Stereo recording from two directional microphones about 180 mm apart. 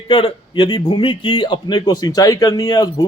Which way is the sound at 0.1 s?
30° left (ahead or behind).